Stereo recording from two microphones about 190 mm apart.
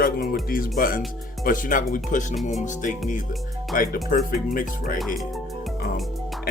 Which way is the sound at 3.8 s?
50° left (ahead or behind).